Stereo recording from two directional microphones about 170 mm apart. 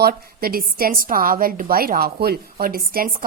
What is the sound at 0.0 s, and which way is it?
A woman's voice, 60° right (ahead or behind).